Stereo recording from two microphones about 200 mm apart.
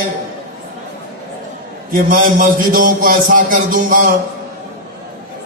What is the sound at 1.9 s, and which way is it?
A man's voice, 45° right (ahead or behind).